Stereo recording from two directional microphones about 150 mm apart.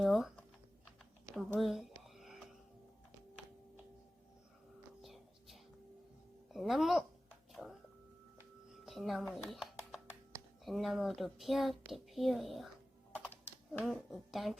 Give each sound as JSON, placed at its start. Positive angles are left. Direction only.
{"t": 0.0, "sound": "speech", "side_deg": 0}
{"t": 1.4, "sound": "speech", "side_deg": 0}
{"t": 2.1, "sound": "music", "side_deg": 0}
{"t": 5.0, "sound": "whispering", "side_deg": 0}
{"t": 6.5, "sound": "speech", "side_deg": 0}
{"t": 7.5, "sound": "a sound", "side_deg": 0}
{"t": 8.7, "sound": "music", "side_deg": 0}
{"t": 9.5, "sound": "a sound", "side_deg": 0}
{"t": 10.7, "sound": "speech", "side_deg": 0}
{"t": 13.7, "sound": "speech", "side_deg": 0}